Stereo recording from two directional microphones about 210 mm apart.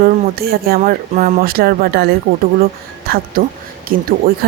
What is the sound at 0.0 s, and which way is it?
Speech, 45° right (ahead or behind).